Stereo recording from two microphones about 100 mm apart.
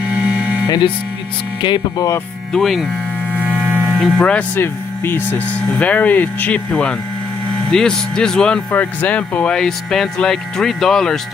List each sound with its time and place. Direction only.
0.1 s a sound: 10° right (ahead or behind)
1.6 s speech: 50° left (ahead or behind)
2.5 s speech: centre (ahead or behind)
3.4 s mains hum: 10° right (ahead or behind)
3.9 s speech: centre (ahead or behind)
4.5 s speech: 20° left (ahead or behind); by 11.2 s 5° left (ahead or behind)